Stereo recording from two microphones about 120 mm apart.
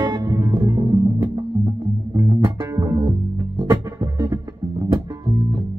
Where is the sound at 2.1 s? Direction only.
25° right (ahead or behind).